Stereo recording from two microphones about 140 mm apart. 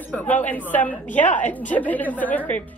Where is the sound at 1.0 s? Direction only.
65° left (ahead or behind).